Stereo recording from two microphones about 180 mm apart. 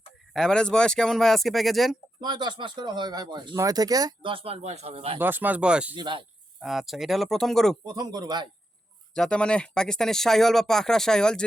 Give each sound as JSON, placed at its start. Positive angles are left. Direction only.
{"t": 0.3, "sound": "speech", "side_deg": 5}
{"t": 2.2, "sound": "speech", "side_deg": -25}
{"t": 5.2, "sound": "speech", "side_deg": -10}
{"t": 5.9, "sound": "speech", "side_deg": -25}
{"t": 6.6, "sound": "speech", "side_deg": 0}
{"t": 7.9, "sound": "speech", "side_deg": -20}
{"t": 9.1, "sound": "speech", "side_deg": 5}